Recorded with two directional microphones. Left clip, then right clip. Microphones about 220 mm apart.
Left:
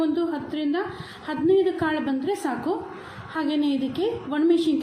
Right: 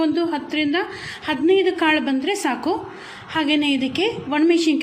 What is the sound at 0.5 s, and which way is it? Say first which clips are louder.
A woman's voice: right 5 dB; 55° right (ahead or behind).